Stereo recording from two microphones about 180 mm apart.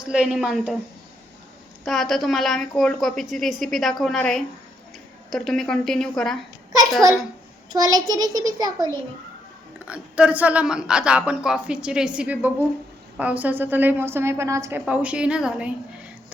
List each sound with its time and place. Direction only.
0.0 s a woman's voice: 5° right (ahead or behind)
1.8 s a woman's voice: centre (ahead or behind)
7.7 s a child's voice: 20° right (ahead or behind)
9.7 s speech: 5° right (ahead or behind)